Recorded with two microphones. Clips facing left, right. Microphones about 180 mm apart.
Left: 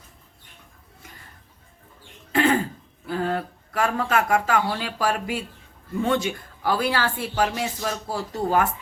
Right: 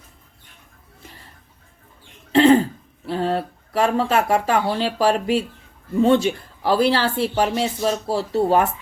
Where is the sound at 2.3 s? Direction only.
30° right (ahead or behind).